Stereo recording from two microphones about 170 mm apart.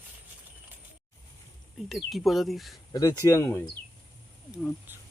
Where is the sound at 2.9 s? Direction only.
20° left (ahead or behind).